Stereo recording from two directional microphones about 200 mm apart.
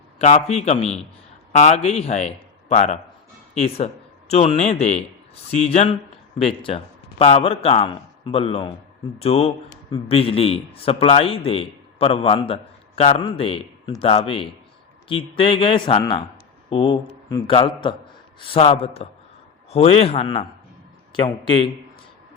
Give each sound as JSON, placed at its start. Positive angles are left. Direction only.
{"t": 0.2, "sound": "a man's voice", "side_deg": 35}